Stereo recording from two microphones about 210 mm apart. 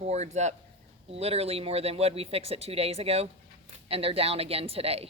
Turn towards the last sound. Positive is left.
turn(degrees=-30)  # may be behind; listen again after turning